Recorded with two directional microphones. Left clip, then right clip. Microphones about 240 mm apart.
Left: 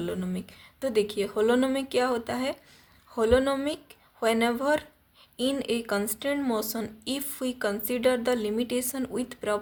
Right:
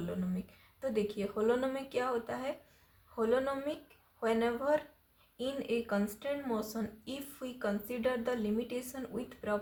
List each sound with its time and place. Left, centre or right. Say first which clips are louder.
0.8 s speech: left 8 dB; left